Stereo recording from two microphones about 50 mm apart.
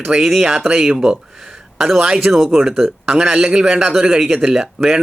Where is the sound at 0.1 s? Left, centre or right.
Centre.